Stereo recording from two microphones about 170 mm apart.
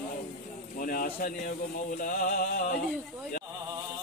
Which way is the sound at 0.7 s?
55° left (ahead or behind).